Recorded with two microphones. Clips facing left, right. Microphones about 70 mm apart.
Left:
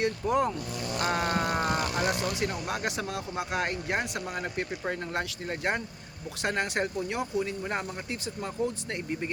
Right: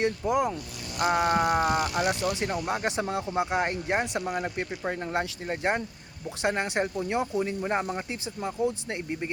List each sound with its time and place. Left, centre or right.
0.3 s speech: centre